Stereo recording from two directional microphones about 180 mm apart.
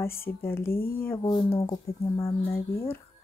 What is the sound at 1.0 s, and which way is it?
Speech, 15° left (ahead or behind).